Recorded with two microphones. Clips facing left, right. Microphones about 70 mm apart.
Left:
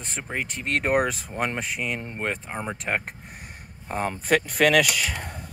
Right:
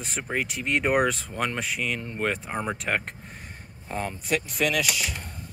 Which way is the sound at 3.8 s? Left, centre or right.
Left.